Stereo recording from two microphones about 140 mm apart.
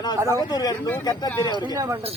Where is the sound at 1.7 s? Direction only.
20° right (ahead or behind).